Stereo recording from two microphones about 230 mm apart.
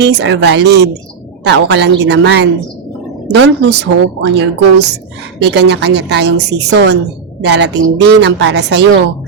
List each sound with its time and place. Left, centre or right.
0.0 s a woman's voice: right